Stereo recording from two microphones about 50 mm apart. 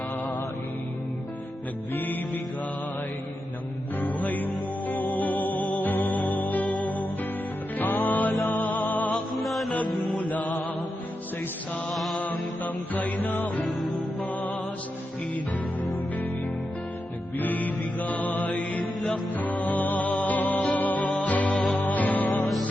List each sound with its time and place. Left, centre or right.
1.9 s music: left
4.0 s music: left
9.4 s music: centre
9.7 s music: left
11.9 s mantra: centre
12.2 s music: left
13.7 s music: centre
16.1 s music: left